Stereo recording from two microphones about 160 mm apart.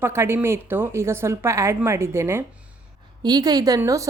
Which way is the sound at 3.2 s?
25° right (ahead or behind).